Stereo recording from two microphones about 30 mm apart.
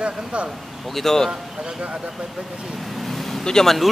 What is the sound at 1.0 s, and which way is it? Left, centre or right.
Speech, centre.